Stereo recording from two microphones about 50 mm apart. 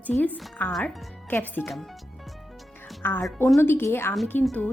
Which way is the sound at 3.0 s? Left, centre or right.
Left.